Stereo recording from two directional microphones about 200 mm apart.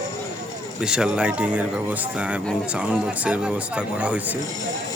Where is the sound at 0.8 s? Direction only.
5° right (ahead or behind).